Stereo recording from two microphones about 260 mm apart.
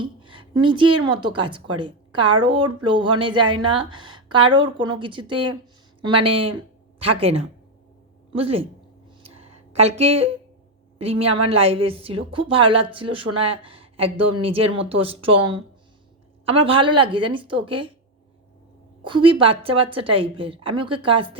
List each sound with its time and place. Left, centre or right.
0.0 s a sound: centre
1.0 s a woman's voice: centre
9.2 s a sound: right
9.9 s speech: right
10.9 s a woman's voice: right
16.5 s speech: right
19.0 s speech: centre